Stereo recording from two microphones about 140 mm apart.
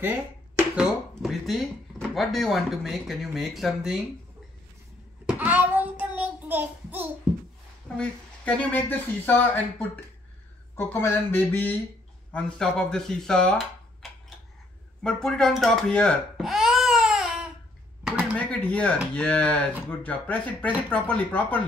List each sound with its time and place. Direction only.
0.0 s speech: 15° right (ahead or behind)
5.2 s child singing: 10° right (ahead or behind)
8.0 s speech: 10° left (ahead or behind)
10.8 s speech: 20° left (ahead or behind)
15.0 s speech: 5° left (ahead or behind)
18.0 s a sound: 10° right (ahead or behind)
18.5 s speech: 10° left (ahead or behind)